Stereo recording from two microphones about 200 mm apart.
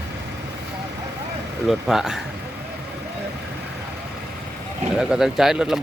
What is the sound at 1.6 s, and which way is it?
Speech, centre (ahead or behind).